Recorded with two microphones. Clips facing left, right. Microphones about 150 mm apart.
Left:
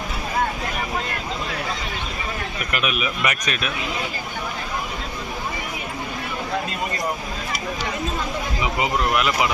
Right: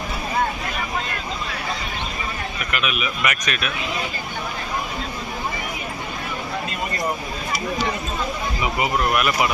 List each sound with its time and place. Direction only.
2.8 s speech: 35° left (ahead or behind)
8.6 s speech: 20° left (ahead or behind)